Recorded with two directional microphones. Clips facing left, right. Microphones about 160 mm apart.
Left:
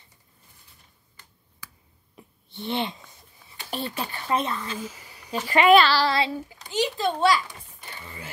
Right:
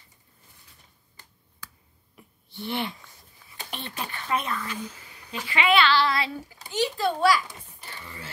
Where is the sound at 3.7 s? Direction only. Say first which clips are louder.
Left 5 dB; 35° left (ahead or behind).